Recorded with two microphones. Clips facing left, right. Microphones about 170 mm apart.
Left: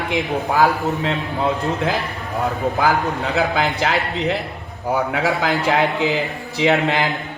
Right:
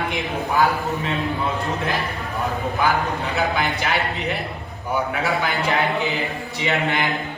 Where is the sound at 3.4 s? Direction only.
90° left.